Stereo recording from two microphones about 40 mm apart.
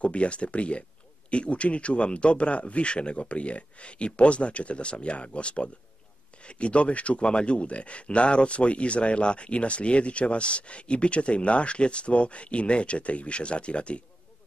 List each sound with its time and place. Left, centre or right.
0.0 s speech: left